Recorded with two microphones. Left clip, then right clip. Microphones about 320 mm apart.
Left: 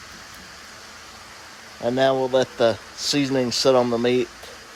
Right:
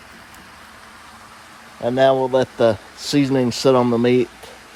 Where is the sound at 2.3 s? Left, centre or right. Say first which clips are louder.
Right 3 dB; right.